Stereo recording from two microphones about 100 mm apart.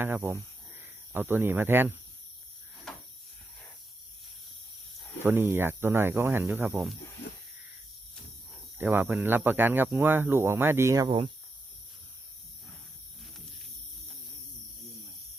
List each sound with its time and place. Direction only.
0.0 s speech: 20° right (ahead or behind)
5.2 s speech: 20° right (ahead or behind)
8.8 s speech: 20° right (ahead or behind)